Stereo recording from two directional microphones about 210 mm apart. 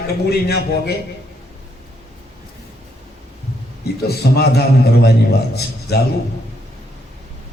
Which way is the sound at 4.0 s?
50° left (ahead or behind).